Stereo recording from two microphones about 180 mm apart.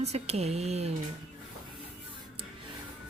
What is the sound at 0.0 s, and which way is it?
Speech, 35° right (ahead or behind).